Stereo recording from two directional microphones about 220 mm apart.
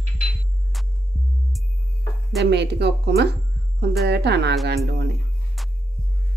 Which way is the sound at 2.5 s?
50° right (ahead or behind).